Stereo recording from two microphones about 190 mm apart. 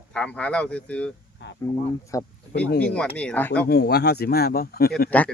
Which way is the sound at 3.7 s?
60° left (ahead or behind).